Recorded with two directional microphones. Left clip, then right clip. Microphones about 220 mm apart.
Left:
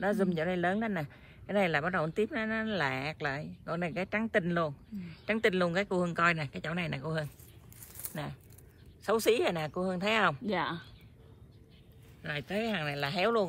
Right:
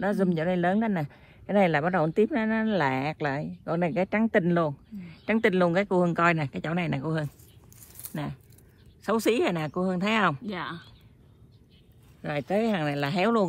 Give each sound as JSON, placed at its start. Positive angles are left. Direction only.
{"t": 0.0, "sound": "a man's voice", "side_deg": -25}
{"t": 10.4, "sound": "speech", "side_deg": 5}
{"t": 12.2, "sound": "a man's voice", "side_deg": -20}